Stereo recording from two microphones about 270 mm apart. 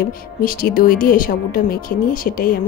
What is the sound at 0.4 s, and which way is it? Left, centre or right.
Speech, left.